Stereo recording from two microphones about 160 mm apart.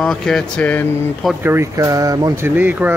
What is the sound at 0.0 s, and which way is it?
Speech, 5° left (ahead or behind).